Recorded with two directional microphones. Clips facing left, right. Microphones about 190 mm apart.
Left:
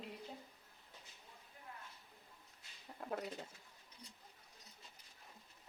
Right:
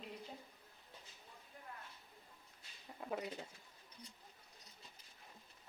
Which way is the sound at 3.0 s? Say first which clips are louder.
Even; centre (ahead or behind).